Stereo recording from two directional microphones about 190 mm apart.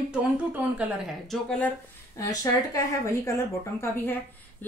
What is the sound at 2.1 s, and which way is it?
A woman's voice, 15° left (ahead or behind).